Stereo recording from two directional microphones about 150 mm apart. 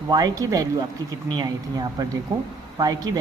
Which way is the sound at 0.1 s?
25° right (ahead or behind).